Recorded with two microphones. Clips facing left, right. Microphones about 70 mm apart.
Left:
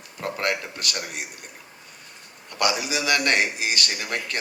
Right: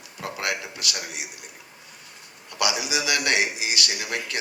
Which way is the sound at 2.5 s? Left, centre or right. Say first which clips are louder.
Left 2 dB; left.